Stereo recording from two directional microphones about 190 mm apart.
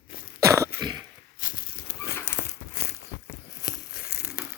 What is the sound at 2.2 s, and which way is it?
Crumpling, 55° left (ahead or behind).